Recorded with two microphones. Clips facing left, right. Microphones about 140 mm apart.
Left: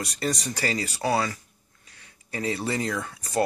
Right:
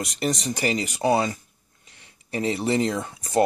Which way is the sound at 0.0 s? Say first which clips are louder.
Right 3 dB; 20° right (ahead or behind).